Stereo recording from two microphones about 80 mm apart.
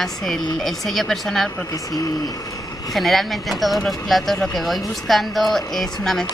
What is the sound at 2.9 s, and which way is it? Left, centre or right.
Speech, centre.